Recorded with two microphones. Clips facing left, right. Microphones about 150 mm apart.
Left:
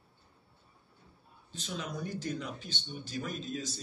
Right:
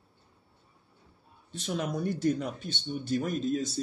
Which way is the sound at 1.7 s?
50° right (ahead or behind).